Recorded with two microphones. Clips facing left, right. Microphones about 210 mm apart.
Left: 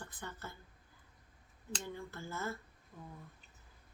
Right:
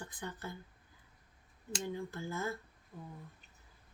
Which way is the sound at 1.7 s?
15° right (ahead or behind).